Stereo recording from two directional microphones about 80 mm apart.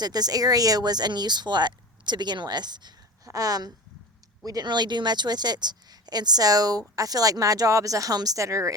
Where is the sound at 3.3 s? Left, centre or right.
Right.